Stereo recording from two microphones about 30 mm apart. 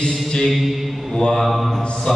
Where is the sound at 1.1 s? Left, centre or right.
Left.